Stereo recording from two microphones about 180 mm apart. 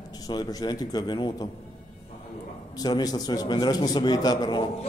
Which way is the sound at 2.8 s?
20° left (ahead or behind).